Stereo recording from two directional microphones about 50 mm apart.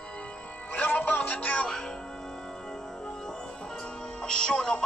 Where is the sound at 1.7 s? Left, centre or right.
Centre.